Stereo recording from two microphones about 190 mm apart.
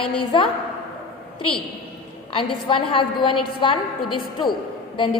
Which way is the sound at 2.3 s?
25° left (ahead or behind).